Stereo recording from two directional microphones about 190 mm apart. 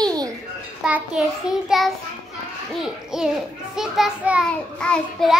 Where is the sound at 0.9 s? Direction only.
5° right (ahead or behind).